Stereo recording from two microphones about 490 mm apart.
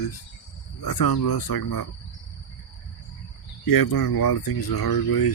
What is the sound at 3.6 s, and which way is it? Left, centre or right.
Speech, left.